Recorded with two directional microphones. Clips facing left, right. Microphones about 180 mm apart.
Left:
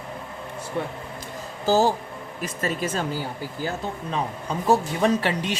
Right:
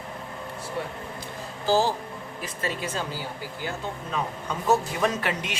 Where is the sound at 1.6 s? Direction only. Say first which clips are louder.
Left 3 dB; 45° left (ahead or behind).